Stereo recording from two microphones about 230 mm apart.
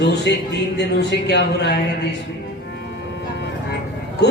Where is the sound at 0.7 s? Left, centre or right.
Left.